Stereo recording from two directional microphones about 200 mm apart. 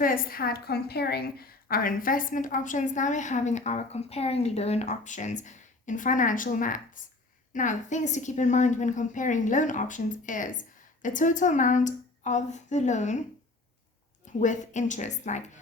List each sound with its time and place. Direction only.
0.0 s a woman's voice: 45° left (ahead or behind)
14.4 s a woman's voice: 35° left (ahead or behind)